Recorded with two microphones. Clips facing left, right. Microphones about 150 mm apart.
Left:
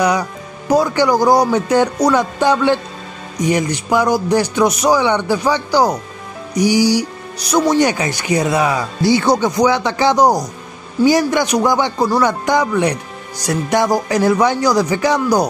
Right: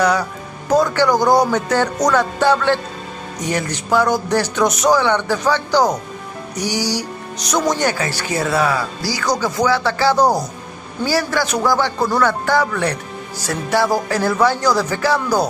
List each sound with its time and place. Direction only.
0.0 s speech: 10° left (ahead or behind)